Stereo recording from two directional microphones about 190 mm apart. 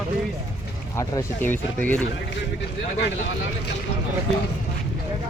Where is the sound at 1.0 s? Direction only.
15° left (ahead or behind).